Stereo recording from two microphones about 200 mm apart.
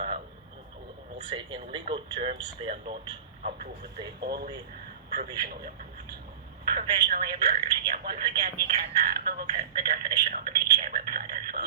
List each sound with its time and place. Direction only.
1.3 s speech: 25° right (ahead or behind)
4.2 s a woman's voice: 55° right (ahead or behind)
10.8 s a sound: 45° right (ahead or behind)